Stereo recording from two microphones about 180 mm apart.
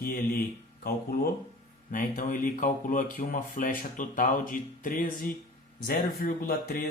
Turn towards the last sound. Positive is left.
turn(degrees=55)  # may be behind; listen again after turning